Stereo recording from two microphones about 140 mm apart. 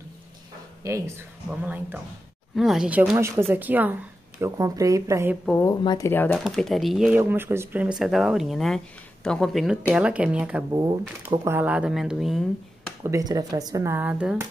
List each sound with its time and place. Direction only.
0.8 s speech: 20° right (ahead or behind)
2.5 s speech: centre (ahead or behind); by 5.3 s 20° right (ahead or behind)
5.6 s speech: 25° left (ahead or behind)
6.5 s speech: centre (ahead or behind)
10.7 s speech: 30° right (ahead or behind)
11.2 s speech: 15° right (ahead or behind)
13.0 s speech: 25° right (ahead or behind); by 14.4 s 5° right (ahead or behind)